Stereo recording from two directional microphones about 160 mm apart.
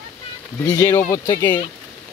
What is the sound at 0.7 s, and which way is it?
Speech, 15° left (ahead or behind).